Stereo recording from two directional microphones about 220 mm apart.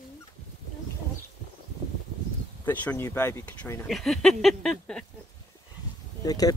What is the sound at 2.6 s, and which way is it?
Speech, 10° left (ahead or behind).